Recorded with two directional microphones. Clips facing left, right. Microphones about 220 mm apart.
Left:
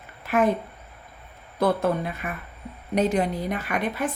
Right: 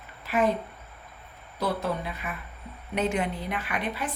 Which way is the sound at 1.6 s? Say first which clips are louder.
Left 6 dB; 50° left (ahead or behind).